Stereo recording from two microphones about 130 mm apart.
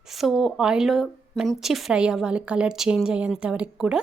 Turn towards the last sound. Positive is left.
turn(degrees=-5)  # may be behind; listen again after turning